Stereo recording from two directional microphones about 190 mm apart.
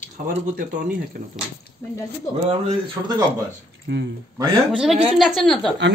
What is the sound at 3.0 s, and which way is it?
Speech, 20° right (ahead or behind).